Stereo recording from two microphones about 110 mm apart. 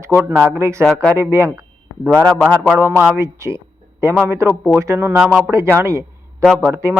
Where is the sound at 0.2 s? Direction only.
15° right (ahead or behind).